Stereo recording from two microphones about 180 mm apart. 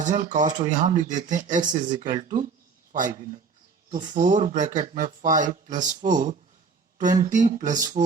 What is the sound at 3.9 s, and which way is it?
Speech, 45° right (ahead or behind).